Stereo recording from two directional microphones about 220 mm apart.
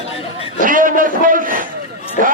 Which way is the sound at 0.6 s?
40° right (ahead or behind).